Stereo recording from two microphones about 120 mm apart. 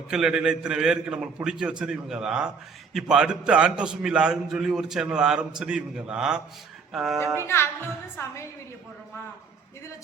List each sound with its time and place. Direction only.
0.1 s a man's voice: 5° right (ahead or behind)
7.4 s speech: 20° left (ahead or behind)